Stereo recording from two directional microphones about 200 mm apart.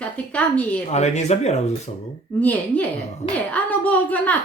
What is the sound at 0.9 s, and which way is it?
Speech, 35° left (ahead or behind).